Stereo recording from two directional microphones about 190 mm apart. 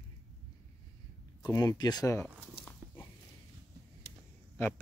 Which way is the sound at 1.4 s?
20° left (ahead or behind).